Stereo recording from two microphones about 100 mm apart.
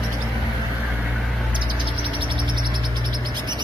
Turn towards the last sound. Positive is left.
turn(degrees=-45)  # may be behind; listen again after turning